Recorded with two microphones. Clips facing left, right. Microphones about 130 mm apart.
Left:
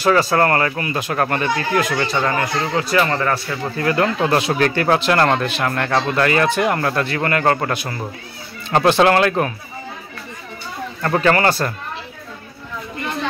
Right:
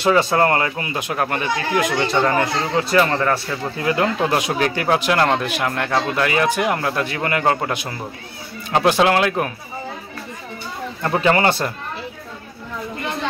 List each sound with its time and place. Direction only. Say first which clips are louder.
0.0 s speech: left 1 dB; 20° right (ahead or behind)
2.3 s speech: right 1 dB; 25° right (ahead or behind)
3.0 s speech: right 1 dB; 5° right (ahead or behind)
11.0 s speech: left 1 dB; 15° right (ahead or behind)